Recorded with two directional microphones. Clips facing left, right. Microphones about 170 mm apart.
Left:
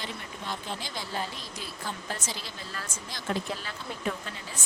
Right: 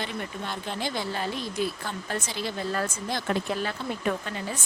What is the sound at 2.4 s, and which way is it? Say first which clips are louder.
Speech: right 12 dB; 60° right (ahead or behind).